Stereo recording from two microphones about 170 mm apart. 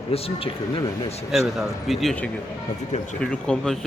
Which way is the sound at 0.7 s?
20° left (ahead or behind).